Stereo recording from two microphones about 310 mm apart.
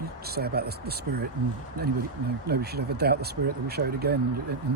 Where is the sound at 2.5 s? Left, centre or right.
Right.